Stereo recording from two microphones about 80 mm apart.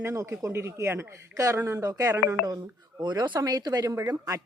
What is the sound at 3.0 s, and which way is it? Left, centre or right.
Speech, right.